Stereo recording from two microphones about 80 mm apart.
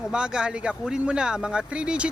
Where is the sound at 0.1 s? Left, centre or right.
Centre.